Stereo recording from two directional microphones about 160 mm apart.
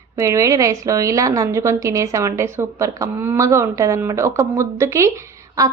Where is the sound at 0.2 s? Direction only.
20° right (ahead or behind).